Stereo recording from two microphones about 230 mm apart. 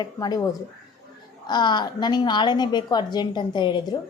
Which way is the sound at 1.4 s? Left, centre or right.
Centre.